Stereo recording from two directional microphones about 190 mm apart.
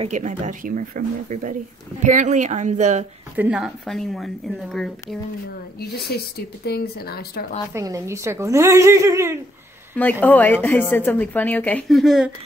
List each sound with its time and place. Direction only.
0.0 s speech: 40° right (ahead or behind)
3.3 s a woman's voice: 5° right (ahead or behind)
5.8 s speech: 55° left (ahead or behind)
7.7 s speech: 15° right (ahead or behind)
10.2 s a woman's voice: 10° left (ahead or behind)